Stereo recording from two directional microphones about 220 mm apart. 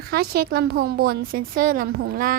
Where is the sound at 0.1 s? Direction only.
45° right (ahead or behind).